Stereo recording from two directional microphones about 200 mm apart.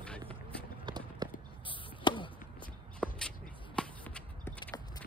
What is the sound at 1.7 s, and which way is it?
Basketball bounce, 25° left (ahead or behind).